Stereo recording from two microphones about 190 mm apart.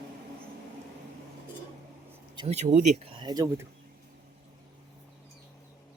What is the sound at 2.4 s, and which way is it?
Speech, 35° right (ahead or behind).